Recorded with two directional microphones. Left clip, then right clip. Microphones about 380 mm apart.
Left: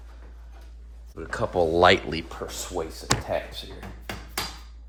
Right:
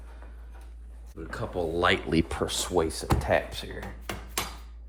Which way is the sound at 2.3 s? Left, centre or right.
Right.